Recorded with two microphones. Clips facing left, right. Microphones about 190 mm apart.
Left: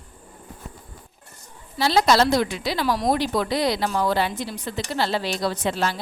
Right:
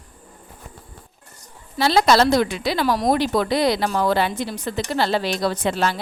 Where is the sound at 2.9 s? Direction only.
45° right (ahead or behind).